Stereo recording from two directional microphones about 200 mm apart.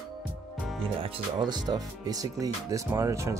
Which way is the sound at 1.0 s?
20° right (ahead or behind).